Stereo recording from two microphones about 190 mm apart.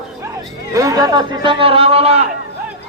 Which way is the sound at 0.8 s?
20° right (ahead or behind).